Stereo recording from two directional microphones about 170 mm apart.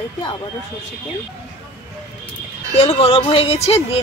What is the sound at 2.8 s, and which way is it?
Speech, 35° left (ahead or behind).